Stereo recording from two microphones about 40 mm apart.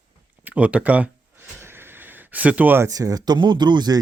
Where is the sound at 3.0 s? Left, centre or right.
Right.